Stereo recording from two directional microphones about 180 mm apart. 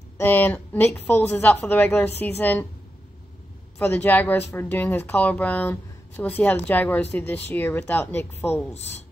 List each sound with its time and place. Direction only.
0.2 s speech: 10° left (ahead or behind)
3.8 s speech: 10° left (ahead or behind)
8.7 s speech: 35° left (ahead or behind)